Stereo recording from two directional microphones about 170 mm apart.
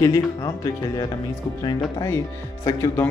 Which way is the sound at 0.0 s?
20° left (ahead or behind).